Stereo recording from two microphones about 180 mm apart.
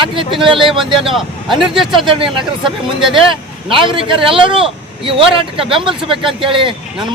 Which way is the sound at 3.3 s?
30° right (ahead or behind).